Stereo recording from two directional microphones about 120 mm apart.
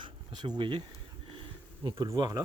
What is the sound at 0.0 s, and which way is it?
Speech, 40° right (ahead or behind).